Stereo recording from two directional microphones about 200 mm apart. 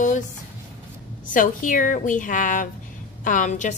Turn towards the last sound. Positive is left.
turn(degrees=35)  # may be behind; listen again after turning